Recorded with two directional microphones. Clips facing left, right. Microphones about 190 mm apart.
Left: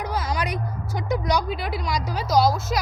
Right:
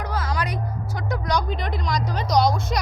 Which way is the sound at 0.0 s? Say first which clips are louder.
Left 1 dB; 15° left (ahead or behind).